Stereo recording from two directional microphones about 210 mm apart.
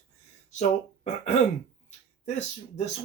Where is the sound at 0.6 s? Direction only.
35° left (ahead or behind).